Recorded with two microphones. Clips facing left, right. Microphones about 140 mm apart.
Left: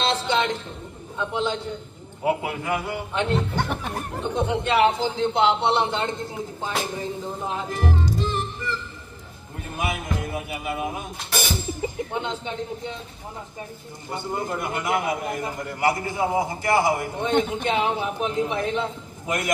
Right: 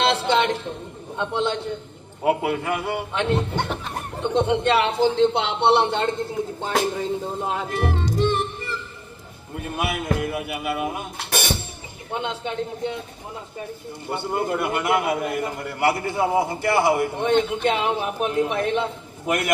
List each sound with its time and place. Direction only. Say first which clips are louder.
0.0 s a sound: right 3 dB; 65° right (ahead or behind)
1.3 s a man's voice: right 2 dB; 65° right (ahead or behind)
3.3 s speech: right 1 dB; 20° right (ahead or behind)
4.2 s a man's voice: right 5 dB; 65° right (ahead or behind)
7.4 s a man's voice: even; 65° right (ahead or behind)
8.2 s music: right 5 dB; 65° right (ahead or behind)
9.7 s a man's voice: right 3 dB; 65° right (ahead or behind)
14.1 s a man's voice: right 4 dB; 60° right (ahead or behind)